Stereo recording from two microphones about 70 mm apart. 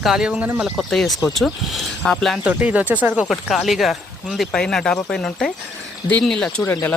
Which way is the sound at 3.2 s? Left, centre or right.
Centre.